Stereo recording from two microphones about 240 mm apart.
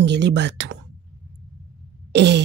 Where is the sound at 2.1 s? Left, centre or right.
Right.